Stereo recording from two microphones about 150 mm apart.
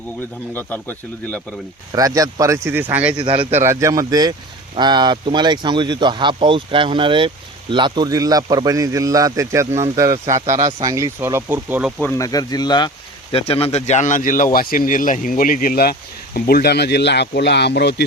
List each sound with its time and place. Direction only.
0.5 s speech: 10° left (ahead or behind)
1.9 s speech: 25° right (ahead or behind)
3.2 s speech: 35° right (ahead or behind)
3.5 s speech: 15° right (ahead or behind)
12.0 s speech: 20° left (ahead or behind)
13.3 s speech: 40° left (ahead or behind); by 18.0 s 90° left